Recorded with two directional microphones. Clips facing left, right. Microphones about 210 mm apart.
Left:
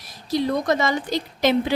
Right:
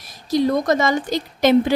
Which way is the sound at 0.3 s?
45° right (ahead or behind).